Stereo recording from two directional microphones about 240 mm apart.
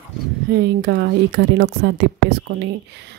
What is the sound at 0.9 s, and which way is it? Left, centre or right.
Speech, right.